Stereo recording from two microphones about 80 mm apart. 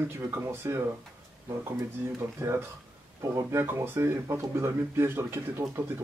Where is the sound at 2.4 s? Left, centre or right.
Right.